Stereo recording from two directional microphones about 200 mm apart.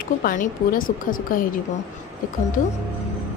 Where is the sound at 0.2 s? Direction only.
45° left (ahead or behind).